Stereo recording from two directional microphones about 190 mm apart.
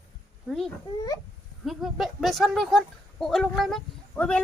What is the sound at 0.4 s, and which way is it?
Speech, centre (ahead or behind).